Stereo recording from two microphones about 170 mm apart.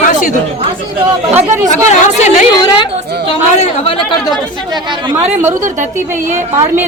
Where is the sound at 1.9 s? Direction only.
40° left (ahead or behind).